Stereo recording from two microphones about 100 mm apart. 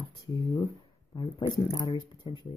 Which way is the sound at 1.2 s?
45° left (ahead or behind).